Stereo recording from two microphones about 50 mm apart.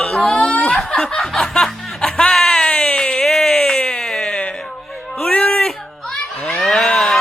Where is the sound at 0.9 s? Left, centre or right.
Centre.